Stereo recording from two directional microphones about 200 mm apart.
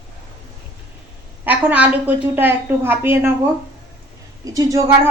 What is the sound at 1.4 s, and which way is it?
A woman's voice, 10° right (ahead or behind).